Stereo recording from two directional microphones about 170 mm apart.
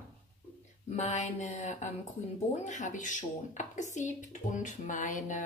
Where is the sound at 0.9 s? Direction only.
45° left (ahead or behind).